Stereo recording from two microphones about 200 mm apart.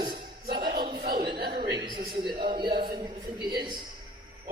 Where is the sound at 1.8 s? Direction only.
25° right (ahead or behind).